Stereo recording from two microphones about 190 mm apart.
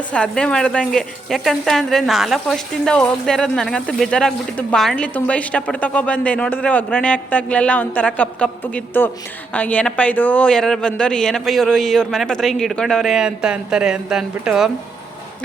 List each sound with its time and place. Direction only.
0.1 s speech: 5° left (ahead or behind)